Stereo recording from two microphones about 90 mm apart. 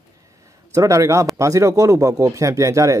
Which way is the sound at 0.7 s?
35° right (ahead or behind).